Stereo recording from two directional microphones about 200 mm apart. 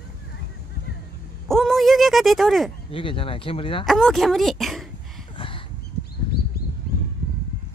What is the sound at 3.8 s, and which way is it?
Speech, centre (ahead or behind).